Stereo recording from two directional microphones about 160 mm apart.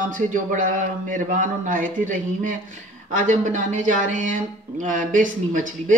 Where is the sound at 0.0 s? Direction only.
55° right (ahead or behind).